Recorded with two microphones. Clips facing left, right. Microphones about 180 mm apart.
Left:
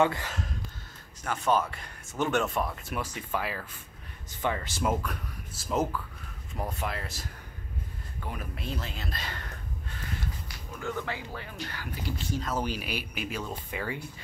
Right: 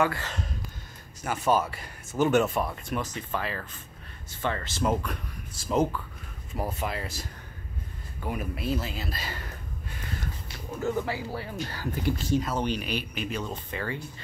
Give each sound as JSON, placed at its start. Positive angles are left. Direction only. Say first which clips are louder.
{"t": 0.0, "sound": "speech", "louder": "left 1 dB", "side_deg": 20}
{"t": 0.3, "sound": "speech", "louder": "right 1 dB", "side_deg": 0}
{"t": 3.0, "sound": "speech", "louder": "left 1 dB", "side_deg": 10}
{"t": 11.0, "sound": "speech", "louder": "right 5 dB", "side_deg": -35}
{"t": 12.5, "sound": "speech", "louder": "right 3 dB", "side_deg": 5}